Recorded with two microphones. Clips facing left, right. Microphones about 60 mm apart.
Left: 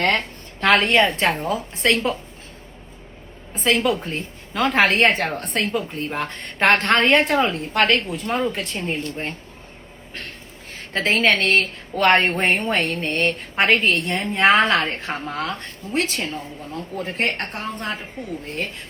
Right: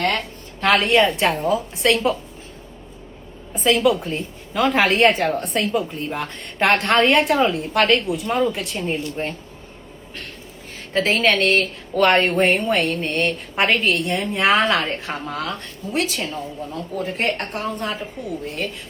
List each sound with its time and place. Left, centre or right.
0.0 s a woman's voice: left
3.5 s a woman's voice: left
10.9 s a woman's voice: left